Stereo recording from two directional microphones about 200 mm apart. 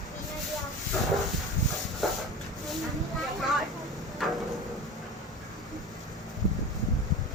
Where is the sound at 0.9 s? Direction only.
Centre (ahead or behind).